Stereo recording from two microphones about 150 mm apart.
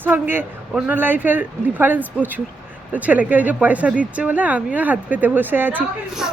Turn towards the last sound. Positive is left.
turn(degrees=-10)  # may be behind; listen again after turning